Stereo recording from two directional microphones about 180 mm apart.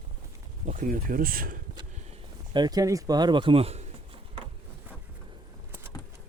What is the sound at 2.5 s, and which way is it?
Speech, 20° right (ahead or behind).